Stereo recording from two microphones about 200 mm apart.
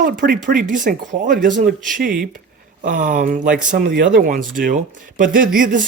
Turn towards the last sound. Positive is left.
turn(degrees=-40)  # may be behind; listen again after turning